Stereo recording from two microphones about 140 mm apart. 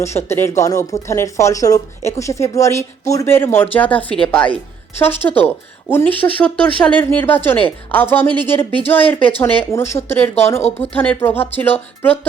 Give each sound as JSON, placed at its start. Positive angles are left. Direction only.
{"t": 0.0, "sound": "speech", "side_deg": 20}